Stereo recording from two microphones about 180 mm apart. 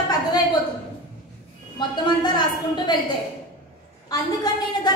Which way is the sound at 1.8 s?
25° left (ahead or behind).